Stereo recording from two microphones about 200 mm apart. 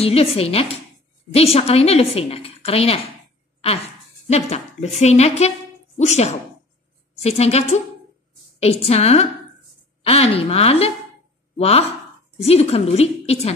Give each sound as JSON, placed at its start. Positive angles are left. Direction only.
{"t": 0.0, "sound": "a woman's voice", "side_deg": 30}
{"t": 4.3, "sound": "a woman's voice", "side_deg": 30}